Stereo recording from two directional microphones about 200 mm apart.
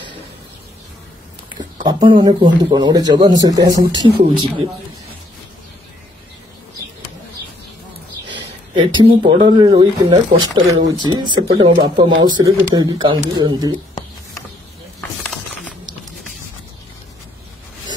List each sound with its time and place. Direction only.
1.9 s speech: 25° right (ahead or behind)
8.7 s speech: 25° right (ahead or behind)
15.0 s a sound: 5° left (ahead or behind)